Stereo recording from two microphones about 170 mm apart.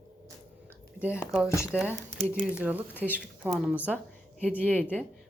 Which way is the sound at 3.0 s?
10° left (ahead or behind).